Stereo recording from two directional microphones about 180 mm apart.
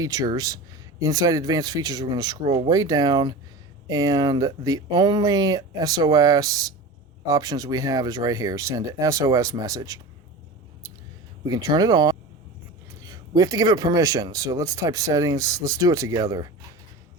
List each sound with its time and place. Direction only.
0.0 s speech: 20° right (ahead or behind)
11.4 s speech: 20° right (ahead or behind)